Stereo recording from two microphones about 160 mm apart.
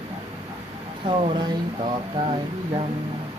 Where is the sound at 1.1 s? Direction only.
30° right (ahead or behind).